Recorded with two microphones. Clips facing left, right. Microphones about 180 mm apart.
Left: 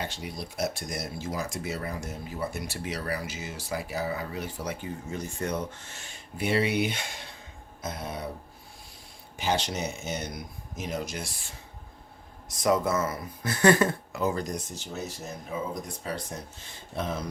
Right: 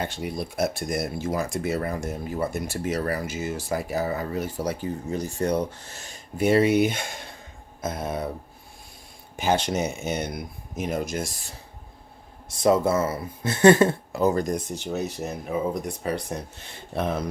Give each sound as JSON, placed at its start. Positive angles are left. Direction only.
{"t": 0.0, "sound": "speech", "side_deg": -50}
{"t": 9.3, "sound": "speech", "side_deg": -50}
{"t": 12.5, "sound": "speech", "side_deg": -30}